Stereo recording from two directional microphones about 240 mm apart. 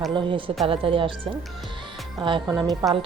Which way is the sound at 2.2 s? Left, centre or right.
Right.